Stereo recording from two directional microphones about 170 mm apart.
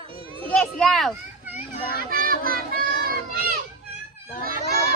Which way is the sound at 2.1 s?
60° right (ahead or behind).